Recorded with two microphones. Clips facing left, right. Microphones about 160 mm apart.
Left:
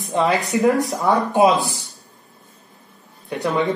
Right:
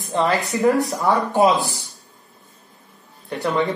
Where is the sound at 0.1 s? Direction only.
15° left (ahead or behind).